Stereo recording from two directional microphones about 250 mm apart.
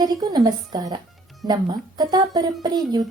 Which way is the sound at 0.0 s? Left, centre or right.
Centre.